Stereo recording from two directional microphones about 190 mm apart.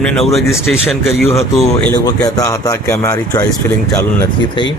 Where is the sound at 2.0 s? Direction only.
20° left (ahead or behind).